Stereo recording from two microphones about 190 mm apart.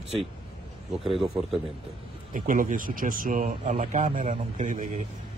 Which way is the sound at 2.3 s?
45° right (ahead or behind).